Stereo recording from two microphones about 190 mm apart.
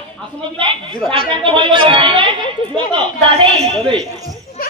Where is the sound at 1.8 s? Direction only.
25° right (ahead or behind).